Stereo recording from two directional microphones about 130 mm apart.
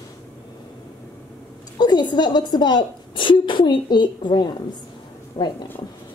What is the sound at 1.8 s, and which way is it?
A woman's voice, 35° left (ahead or behind).